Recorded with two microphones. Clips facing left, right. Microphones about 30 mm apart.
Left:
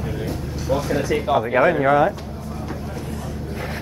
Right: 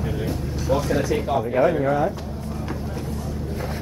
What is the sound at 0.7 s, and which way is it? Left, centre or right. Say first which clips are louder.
Speech: even; centre.